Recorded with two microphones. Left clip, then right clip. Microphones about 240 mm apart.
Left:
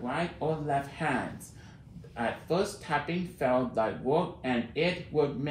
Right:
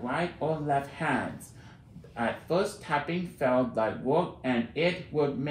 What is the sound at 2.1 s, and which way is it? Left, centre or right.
Speech, centre.